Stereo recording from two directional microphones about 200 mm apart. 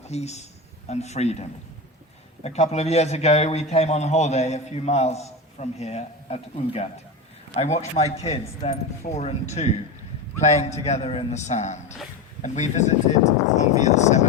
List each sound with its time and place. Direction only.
0.0 s a man's voice: 35° left (ahead or behind)